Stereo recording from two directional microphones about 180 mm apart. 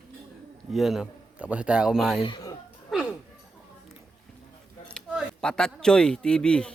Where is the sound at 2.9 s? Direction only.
Centre (ahead or behind).